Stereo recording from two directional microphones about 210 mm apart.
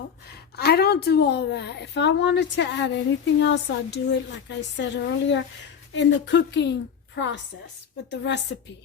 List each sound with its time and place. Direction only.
0.5 s a woman's voice: 50° left (ahead or behind)